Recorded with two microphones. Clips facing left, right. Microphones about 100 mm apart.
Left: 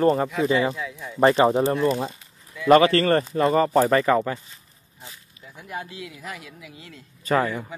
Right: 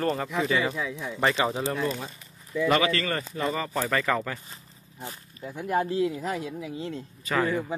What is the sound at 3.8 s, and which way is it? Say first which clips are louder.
Speech: left 7 dB; 30° left (ahead or behind).